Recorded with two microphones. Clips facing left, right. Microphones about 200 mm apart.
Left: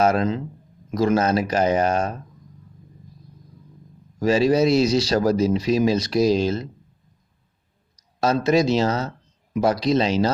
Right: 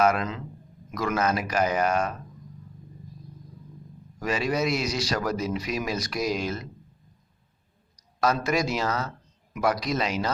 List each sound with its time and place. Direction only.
0.0 s a man's voice: 30° left (ahead or behind)
4.2 s speech: 30° left (ahead or behind)
8.2 s speech: 25° left (ahead or behind)